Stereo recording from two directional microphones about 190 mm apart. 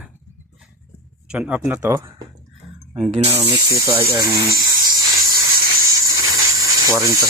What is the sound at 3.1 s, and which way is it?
Speech, 30° right (ahead or behind).